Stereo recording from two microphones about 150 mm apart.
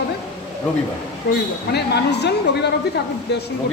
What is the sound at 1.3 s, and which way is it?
A woman's voice, 90° left.